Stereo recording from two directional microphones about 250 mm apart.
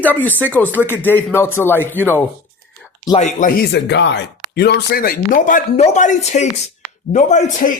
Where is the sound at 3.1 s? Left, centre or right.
Left.